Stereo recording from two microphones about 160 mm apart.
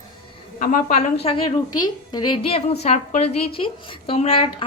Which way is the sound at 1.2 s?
40° left (ahead or behind).